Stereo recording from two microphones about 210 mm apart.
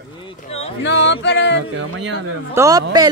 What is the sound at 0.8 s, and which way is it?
Music, 60° left (ahead or behind).